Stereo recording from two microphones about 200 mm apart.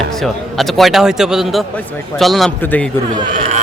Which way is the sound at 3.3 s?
40° right (ahead or behind).